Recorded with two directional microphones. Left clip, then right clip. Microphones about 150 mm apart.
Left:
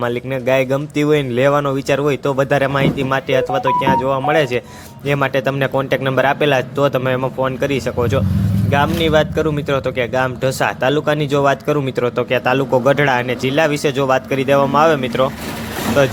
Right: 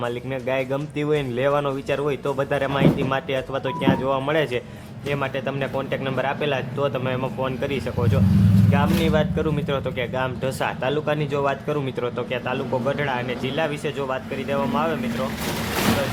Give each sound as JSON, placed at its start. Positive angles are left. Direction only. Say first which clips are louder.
{"t": 0.0, "sound": "speech", "louder": "left 7 dB", "side_deg": 30}
{"t": 5.0, "sound": "speech", "louder": "left 9 dB", "side_deg": 40}